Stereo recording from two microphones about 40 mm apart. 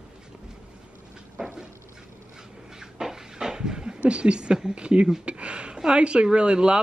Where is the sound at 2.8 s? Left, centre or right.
Centre.